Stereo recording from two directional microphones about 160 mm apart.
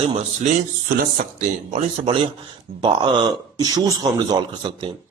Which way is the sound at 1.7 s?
40° right (ahead or behind).